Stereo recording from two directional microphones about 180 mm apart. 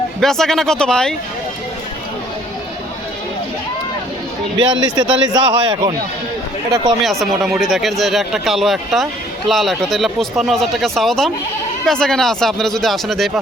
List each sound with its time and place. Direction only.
0.2 s speech: centre (ahead or behind)
4.5 s a man's voice: 25° right (ahead or behind)
7.0 s speech: centre (ahead or behind)